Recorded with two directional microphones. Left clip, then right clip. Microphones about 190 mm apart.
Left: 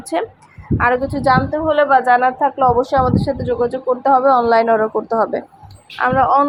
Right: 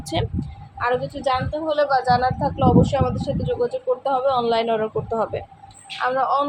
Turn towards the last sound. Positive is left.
turn(degrees=35)  # may be behind; listen again after turning